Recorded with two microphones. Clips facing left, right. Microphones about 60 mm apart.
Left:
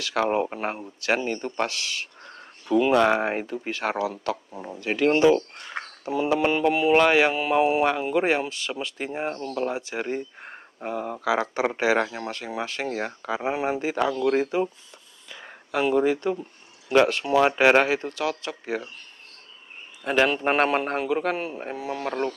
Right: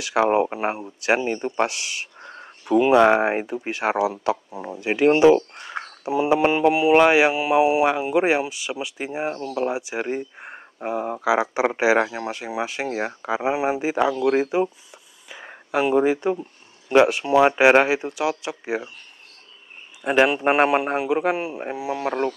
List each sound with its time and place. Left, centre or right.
0.0 s speech: centre
20.0 s speech: centre